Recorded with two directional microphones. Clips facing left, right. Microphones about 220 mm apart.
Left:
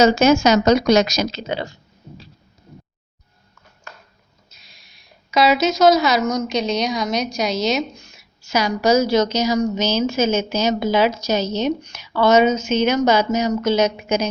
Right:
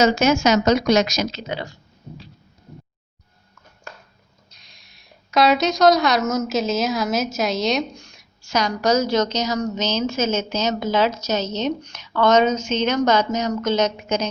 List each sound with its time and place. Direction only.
0.0 s speech: 30° left (ahead or behind)
4.5 s a woman's voice: 5° left (ahead or behind)